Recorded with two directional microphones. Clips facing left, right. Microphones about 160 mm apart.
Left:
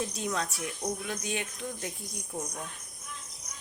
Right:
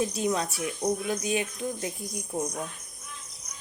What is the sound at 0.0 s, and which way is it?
Speech, 5° right (ahead or behind).